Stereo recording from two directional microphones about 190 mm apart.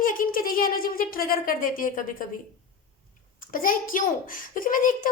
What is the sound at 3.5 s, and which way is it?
A woman's voice, 45° left (ahead or behind).